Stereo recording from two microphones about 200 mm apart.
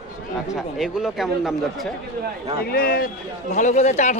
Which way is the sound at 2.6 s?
50° left (ahead or behind).